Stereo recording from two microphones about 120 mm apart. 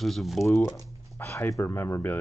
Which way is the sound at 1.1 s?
20° left (ahead or behind).